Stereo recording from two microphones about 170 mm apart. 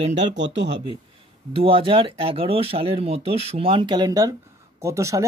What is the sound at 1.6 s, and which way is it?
Speech, 30° right (ahead or behind).